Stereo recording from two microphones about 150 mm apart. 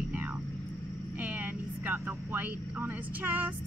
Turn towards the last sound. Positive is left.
turn(degrees=-10)  # may be behind; listen again after turning